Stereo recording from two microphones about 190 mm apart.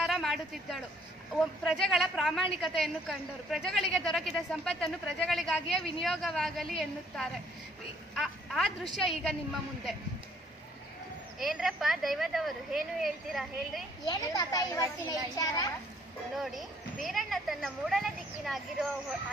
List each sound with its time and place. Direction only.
0.0 s a sound: centre (ahead or behind)
1.3 s a woman's voice: centre (ahead or behind)
11.3 s a woman's voice: centre (ahead or behind)
14.0 s a child's voice: 20° left (ahead or behind)
16.4 s a woman's voice: centre (ahead or behind)